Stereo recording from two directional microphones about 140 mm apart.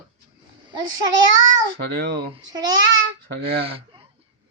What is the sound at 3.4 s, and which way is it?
Speech, 40° right (ahead or behind).